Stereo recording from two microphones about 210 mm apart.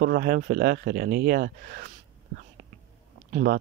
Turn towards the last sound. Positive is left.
turn(degrees=-50)  # may be behind; listen again after turning